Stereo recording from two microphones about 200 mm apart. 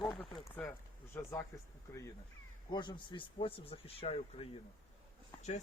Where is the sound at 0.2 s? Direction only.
10° left (ahead or behind).